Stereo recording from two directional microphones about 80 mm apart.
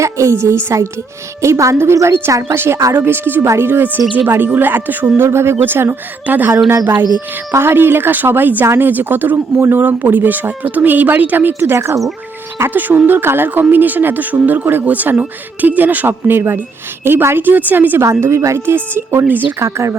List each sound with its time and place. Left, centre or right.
0.0 s speech: right
9.8 s speech: right
18.0 s speech: right